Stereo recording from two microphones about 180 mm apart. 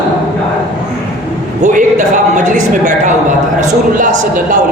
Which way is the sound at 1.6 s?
45° right (ahead or behind).